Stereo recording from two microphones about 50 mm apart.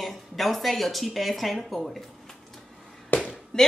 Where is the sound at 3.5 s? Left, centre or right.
Centre.